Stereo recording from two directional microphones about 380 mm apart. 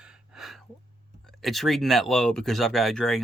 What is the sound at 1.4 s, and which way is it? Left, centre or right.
Speech, centre.